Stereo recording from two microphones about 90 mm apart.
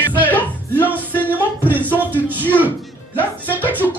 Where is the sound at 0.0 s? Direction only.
20° left (ahead or behind).